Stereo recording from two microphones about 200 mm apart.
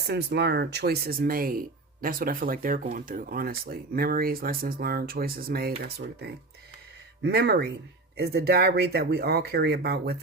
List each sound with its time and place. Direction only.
0.1 s speech: 55° right (ahead or behind)